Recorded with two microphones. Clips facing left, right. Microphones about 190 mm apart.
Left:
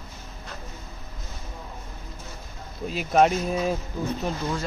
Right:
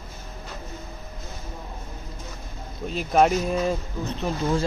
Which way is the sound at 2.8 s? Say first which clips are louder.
Even; centre (ahead or behind).